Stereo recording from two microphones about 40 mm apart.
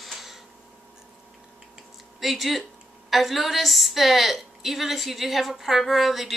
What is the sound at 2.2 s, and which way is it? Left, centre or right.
Speech, centre.